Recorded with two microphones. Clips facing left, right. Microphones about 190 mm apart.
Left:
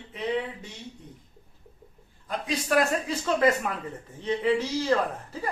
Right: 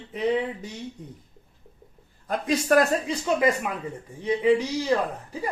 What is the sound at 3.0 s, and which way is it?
Speech, 15° right (ahead or behind).